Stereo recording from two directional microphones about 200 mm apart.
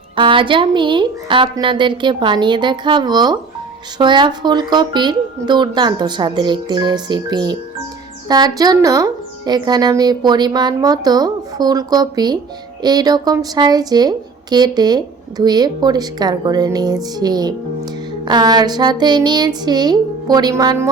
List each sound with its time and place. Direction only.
0.2 s a woman's voice: 25° right (ahead or behind)